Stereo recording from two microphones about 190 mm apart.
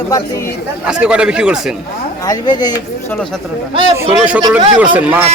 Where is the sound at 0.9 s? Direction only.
5° right (ahead or behind).